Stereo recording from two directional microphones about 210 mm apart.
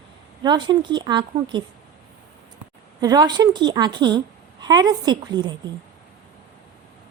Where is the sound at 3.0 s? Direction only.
20° right (ahead or behind).